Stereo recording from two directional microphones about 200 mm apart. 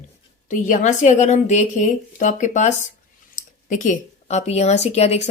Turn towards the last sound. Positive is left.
turn(degrees=35)  # may be behind; listen again after turning